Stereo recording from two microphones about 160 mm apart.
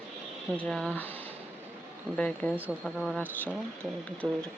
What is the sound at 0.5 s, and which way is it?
Speech, 5° left (ahead or behind).